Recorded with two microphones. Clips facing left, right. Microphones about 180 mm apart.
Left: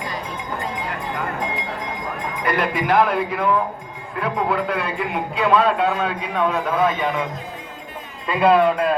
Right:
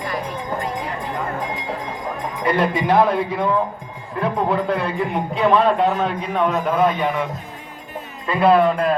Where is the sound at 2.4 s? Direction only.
25° right (ahead or behind).